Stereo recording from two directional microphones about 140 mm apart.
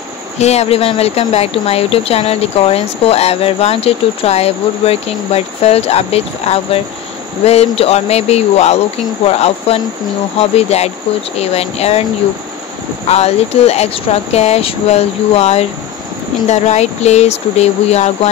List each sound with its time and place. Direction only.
0.4 s speech: 50° left (ahead or behind)
13.1 s speech: 50° left (ahead or behind)